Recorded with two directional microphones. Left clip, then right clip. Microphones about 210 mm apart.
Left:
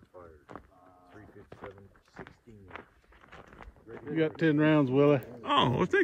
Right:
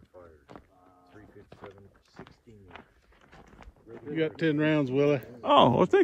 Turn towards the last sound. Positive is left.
turn(degrees=0)  # may be behind; listen again after turning